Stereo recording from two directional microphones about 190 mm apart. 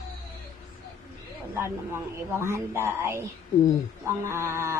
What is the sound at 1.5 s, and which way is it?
Speech, 15° right (ahead or behind).